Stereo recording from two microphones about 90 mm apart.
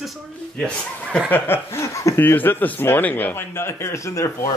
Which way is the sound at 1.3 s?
25° left (ahead or behind).